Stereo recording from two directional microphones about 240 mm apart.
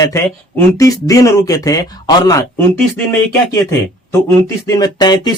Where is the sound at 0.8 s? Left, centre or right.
Centre.